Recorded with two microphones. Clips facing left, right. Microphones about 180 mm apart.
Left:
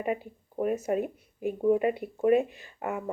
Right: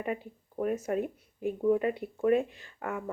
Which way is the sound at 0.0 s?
15° left (ahead or behind).